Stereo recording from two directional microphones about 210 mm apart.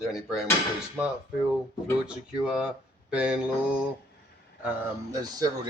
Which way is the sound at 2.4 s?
5° right (ahead or behind).